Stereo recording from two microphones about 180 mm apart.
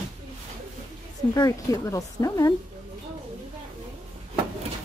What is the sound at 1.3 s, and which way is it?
Speech, 20° left (ahead or behind).